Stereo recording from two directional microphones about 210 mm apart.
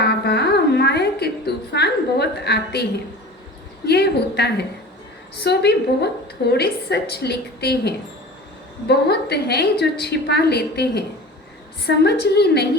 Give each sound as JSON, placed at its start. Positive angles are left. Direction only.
{"t": 0.0, "sound": "music", "side_deg": 50}
{"t": 3.8, "sound": "a woman's voice", "side_deg": 50}